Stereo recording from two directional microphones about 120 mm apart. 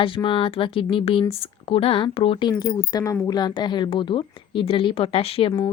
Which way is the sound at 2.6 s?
25° left (ahead or behind).